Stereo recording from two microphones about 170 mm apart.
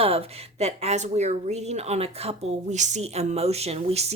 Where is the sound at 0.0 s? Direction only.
35° right (ahead or behind).